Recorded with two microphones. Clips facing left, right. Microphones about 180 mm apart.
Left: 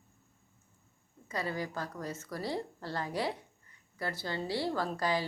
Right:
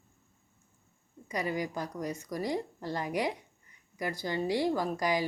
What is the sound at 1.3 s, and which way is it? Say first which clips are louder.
A woman's voice: right 3 dB; 15° right (ahead or behind).